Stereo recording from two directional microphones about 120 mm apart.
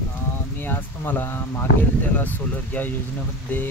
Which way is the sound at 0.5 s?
15° left (ahead or behind).